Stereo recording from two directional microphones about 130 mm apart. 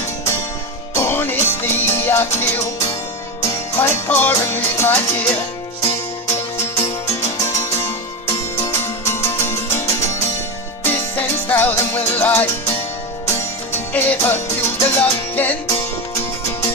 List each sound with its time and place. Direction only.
0.9 s music: 15° left (ahead or behind)
7.1 s music: 20° left (ahead or behind)
13.9 s music: 15° left (ahead or behind)
15.7 s music: 25° left (ahead or behind)